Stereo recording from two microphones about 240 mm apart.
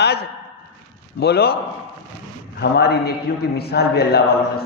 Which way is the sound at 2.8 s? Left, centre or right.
Left.